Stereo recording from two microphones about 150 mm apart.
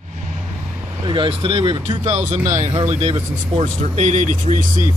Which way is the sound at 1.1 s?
35° right (ahead or behind).